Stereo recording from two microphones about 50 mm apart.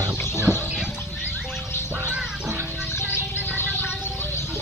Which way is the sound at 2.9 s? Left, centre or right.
Left.